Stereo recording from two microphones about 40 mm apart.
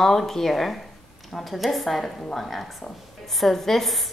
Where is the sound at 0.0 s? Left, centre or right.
Centre.